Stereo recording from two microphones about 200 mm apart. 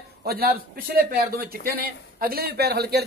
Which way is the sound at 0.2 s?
50° right (ahead or behind).